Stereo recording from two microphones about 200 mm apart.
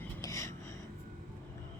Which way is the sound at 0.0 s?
15° left (ahead or behind).